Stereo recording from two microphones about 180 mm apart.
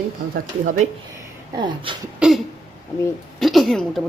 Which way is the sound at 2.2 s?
5° right (ahead or behind).